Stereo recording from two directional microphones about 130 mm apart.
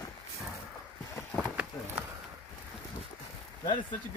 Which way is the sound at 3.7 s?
40° left (ahead or behind).